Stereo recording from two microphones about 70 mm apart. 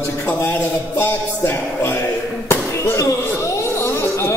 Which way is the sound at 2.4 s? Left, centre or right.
Left.